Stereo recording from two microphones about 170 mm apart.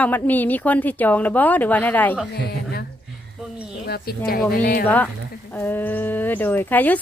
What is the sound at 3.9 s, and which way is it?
Speech, 60° left (ahead or behind).